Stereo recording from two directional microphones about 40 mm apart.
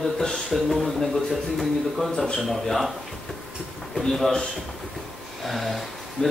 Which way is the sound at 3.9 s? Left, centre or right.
Centre.